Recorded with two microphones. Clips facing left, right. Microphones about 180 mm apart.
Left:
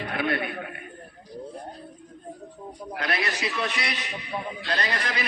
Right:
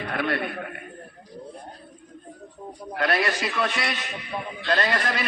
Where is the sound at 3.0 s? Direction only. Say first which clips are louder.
Right 5 dB; 45° right (ahead or behind).